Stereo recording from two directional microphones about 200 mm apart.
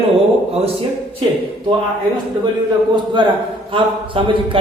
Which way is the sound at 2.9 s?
25° right (ahead or behind).